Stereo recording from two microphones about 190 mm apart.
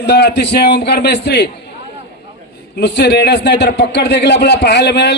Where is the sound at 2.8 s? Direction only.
60° left (ahead or behind).